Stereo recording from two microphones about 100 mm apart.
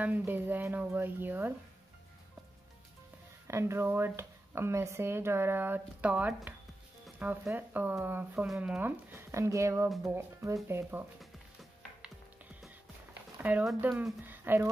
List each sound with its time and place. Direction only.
0.2 s speech: 20° right (ahead or behind)
3.4 s speech: 30° right (ahead or behind)
9.1 s speech: 30° right (ahead or behind)
13.1 s a sound: 15° right (ahead or behind)
13.7 s speech: 20° right (ahead or behind)